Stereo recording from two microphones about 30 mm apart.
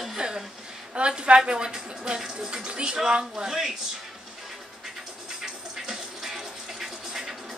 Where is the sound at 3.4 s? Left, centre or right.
Centre.